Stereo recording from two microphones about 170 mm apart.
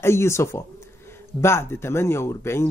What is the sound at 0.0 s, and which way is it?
Speech, 15° left (ahead or behind).